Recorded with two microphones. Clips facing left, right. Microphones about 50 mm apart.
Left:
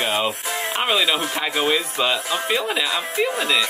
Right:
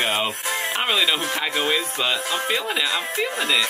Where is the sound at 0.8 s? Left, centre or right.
Centre.